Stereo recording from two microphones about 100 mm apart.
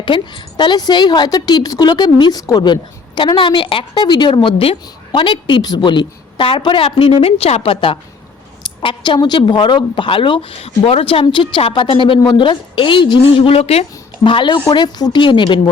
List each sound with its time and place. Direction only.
0.0 s a woman's voice: 55° left (ahead or behind)
3.3 s a woman's voice: 55° left (ahead or behind)
8.6 s a sound: 50° left (ahead or behind)
9.1 s a woman's voice: 45° left (ahead or behind)
10.6 s a woman's voice: 80° left
14.3 s a woman's voice: 55° left (ahead or behind)
14.7 s a woman's voice: 45° left (ahead or behind)